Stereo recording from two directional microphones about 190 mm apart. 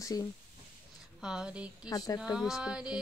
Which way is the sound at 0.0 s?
20° left (ahead or behind).